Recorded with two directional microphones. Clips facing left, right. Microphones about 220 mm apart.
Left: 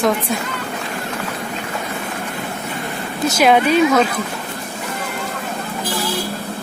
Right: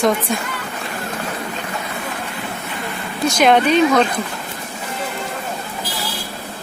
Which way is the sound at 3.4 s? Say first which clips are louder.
Even; 5° left (ahead or behind).